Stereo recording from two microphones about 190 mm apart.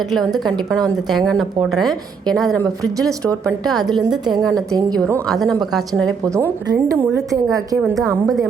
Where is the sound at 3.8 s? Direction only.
Centre (ahead or behind).